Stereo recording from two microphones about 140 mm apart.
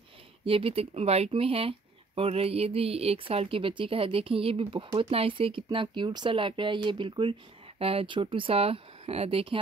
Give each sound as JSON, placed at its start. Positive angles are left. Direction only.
{"t": 0.5, "sound": "speech", "side_deg": -40}